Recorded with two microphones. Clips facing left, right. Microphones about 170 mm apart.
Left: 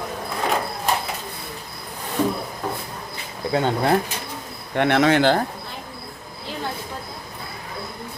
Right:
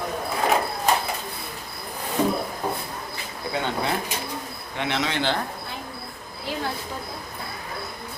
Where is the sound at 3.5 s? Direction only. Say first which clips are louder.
Left 7 dB; 45° left (ahead or behind).